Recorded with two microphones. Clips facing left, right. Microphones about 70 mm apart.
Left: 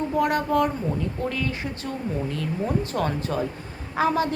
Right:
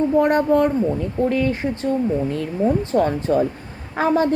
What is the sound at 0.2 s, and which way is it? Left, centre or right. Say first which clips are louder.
A woman's voice: right 4 dB; right.